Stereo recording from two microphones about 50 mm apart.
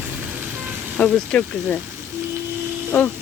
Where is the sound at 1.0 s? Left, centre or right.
Left.